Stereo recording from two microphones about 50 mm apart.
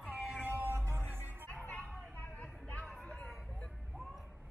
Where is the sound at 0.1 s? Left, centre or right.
Centre.